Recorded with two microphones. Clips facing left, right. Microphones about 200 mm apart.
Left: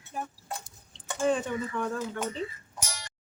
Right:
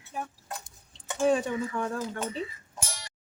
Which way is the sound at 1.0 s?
15° right (ahead or behind).